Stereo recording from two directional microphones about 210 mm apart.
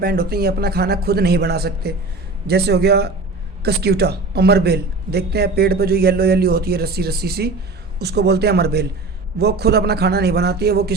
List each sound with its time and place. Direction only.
0.0 s a man's voice: 45° right (ahead or behind)